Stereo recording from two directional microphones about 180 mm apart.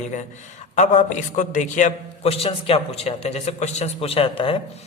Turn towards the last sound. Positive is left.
turn(degrees=30)  # may be behind; listen again after turning